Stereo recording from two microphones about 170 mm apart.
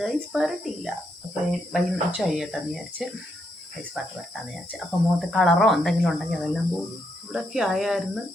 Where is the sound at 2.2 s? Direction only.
Centre (ahead or behind).